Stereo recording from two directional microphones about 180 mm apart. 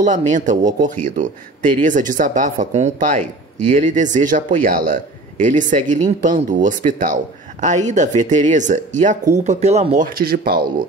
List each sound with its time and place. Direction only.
0.0 s speech: 45° right (ahead or behind)
9.9 s speech: 55° right (ahead or behind)